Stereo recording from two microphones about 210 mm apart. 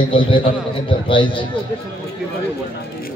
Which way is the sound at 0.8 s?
25° left (ahead or behind).